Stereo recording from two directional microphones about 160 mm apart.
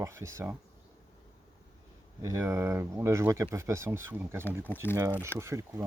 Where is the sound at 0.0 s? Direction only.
20° right (ahead or behind).